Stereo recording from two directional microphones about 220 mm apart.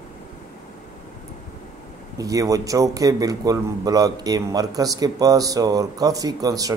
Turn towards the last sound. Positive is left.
turn(degrees=-15)  # may be behind; listen again after turning